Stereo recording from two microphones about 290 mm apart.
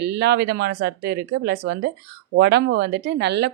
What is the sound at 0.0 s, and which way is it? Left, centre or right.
Speech, right.